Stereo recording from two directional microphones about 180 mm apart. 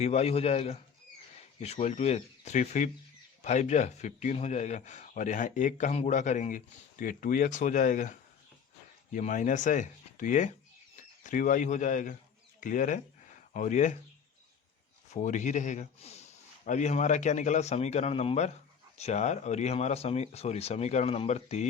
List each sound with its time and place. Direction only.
0.0 s a man's voice: 35° left (ahead or behind)
9.1 s speech: 45° left (ahead or behind)
15.1 s a man's voice: 45° left (ahead or behind)